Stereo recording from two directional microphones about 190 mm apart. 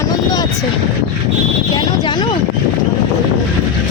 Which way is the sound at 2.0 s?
25° left (ahead or behind).